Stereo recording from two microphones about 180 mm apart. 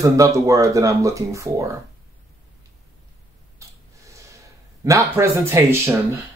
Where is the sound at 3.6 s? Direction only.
15° right (ahead or behind).